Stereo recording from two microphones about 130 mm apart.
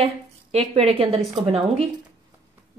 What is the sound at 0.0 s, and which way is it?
A woman's voice, 50° right (ahead or behind).